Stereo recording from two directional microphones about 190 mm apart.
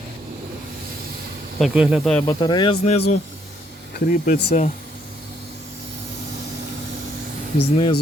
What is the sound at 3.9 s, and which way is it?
Speech, 45° left (ahead or behind).